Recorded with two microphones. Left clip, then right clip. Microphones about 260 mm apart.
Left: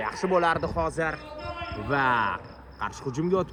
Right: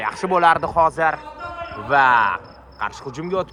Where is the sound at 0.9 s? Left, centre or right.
Centre.